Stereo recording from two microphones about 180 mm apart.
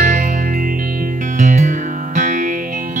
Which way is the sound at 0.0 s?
45° right (ahead or behind).